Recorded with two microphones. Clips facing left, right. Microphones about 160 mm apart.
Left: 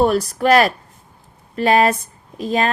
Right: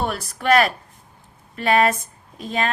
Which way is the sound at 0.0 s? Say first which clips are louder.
Left 9 dB; 40° left (ahead or behind).